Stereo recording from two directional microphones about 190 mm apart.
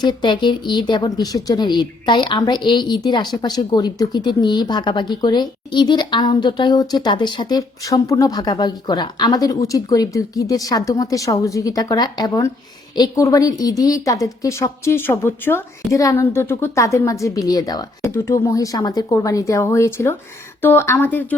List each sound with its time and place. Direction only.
0.0 s a woman's voice: 25° left (ahead or behind)